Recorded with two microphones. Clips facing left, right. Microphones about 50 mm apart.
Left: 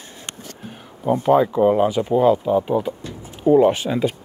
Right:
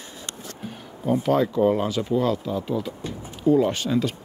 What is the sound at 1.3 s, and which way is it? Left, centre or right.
Speech, centre.